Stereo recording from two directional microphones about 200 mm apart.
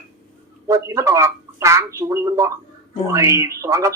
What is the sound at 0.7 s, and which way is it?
A man's voice, 15° right (ahead or behind).